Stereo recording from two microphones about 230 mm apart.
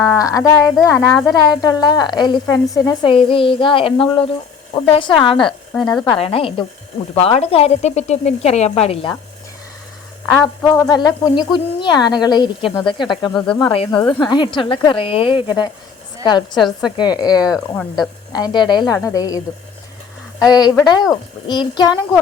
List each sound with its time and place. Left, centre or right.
0.2 s a woman's voice: centre
5.5 s speech: centre
6.1 s a woman's voice: left
10.2 s speech: centre
10.8 s a woman's voice: centre
13.3 s speech: centre
13.7 s a woman's voice: left
16.6 s speech: centre
17.0 s a woman's voice: centre
20.4 s a woman's voice: centre